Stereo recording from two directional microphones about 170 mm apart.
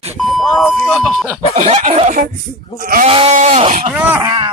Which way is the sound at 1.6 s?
40° right (ahead or behind).